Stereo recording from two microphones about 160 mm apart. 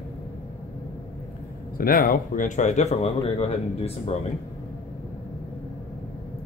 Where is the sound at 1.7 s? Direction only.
65° left (ahead or behind); by 4.1 s 40° left (ahead or behind).